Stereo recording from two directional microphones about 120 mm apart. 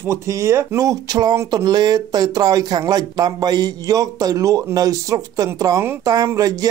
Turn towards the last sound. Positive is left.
turn(degrees=-30)  # may be behind; listen again after turning